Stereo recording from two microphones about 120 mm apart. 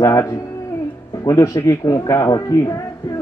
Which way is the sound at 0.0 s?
25° left (ahead or behind).